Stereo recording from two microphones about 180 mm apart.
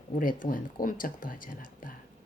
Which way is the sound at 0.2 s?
50° left (ahead or behind).